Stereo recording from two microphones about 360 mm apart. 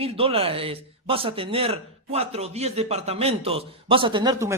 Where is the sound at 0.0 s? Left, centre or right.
Centre.